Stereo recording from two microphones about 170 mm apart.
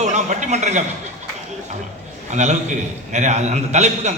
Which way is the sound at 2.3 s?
45° right (ahead or behind).